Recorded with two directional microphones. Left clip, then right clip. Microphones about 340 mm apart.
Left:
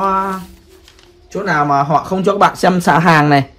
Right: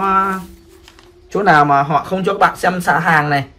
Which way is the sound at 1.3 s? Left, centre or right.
Centre.